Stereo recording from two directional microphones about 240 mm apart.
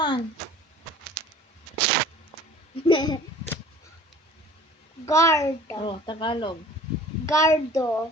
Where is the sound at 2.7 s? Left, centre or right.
Centre.